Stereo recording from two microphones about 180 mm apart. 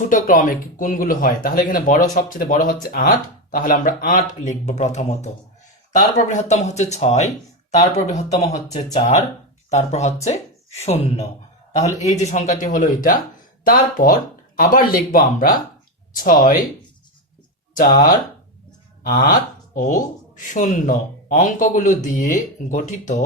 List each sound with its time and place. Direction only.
0.1 s speech: 45° left (ahead or behind)
17.7 s speech: 50° left (ahead or behind)
19.3 s speech: 50° left (ahead or behind)